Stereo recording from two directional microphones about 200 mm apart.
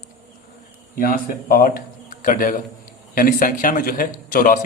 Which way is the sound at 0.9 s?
45° left (ahead or behind).